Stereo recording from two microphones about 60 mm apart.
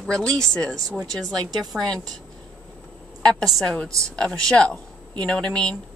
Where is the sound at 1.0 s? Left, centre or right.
Right.